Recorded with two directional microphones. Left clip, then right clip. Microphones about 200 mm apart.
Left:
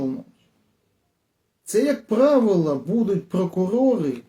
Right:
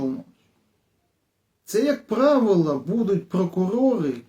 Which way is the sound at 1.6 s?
5° left (ahead or behind).